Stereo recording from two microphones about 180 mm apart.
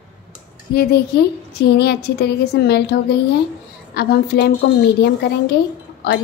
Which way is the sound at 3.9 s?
65° left (ahead or behind).